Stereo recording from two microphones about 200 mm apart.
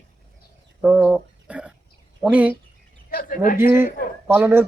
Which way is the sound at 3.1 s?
45° left (ahead or behind).